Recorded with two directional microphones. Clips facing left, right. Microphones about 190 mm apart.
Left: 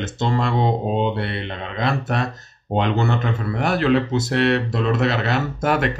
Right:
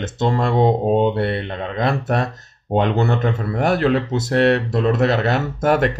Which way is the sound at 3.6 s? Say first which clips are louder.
Right 1 dB; 45° right (ahead or behind).